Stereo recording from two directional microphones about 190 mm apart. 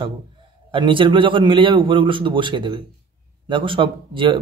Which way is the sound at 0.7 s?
25° right (ahead or behind).